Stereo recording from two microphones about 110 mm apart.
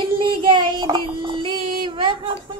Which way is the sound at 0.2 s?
45° right (ahead or behind).